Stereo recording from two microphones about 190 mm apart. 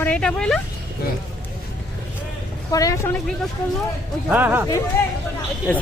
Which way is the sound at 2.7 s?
15° left (ahead or behind).